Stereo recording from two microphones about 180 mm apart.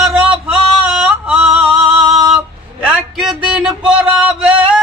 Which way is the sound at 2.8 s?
5° right (ahead or behind).